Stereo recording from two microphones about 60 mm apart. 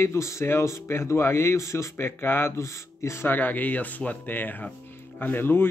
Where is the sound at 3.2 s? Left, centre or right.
Left.